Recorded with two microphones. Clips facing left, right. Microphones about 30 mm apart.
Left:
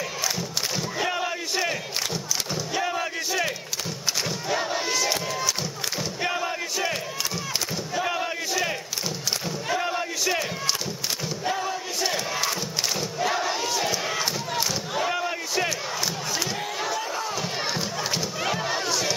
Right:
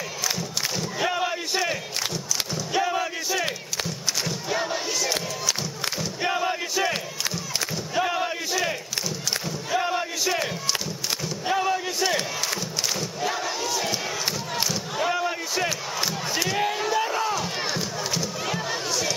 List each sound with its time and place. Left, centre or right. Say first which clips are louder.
0.4 s crowd: even; centre
1.0 s a sound: right 4 dB; centre
2.7 s a sound: right 4 dB; centre
3.0 s battle cry: even; centre
6.2 s battle cry: right 3 dB; centre
8.0 s battle cry: right 3 dB; centre
9.8 s battle cry: right 6 dB; centre
11.5 s battle cry: right 10 dB; right
13.2 s battle cry: left 3 dB; centre
14.7 s a sound: right 1 dB; centre
16.0 s crowd: right 1 dB; centre
16.9 s a sound: right 5 dB; centre
18.1 s crowd: left 2 dB; centre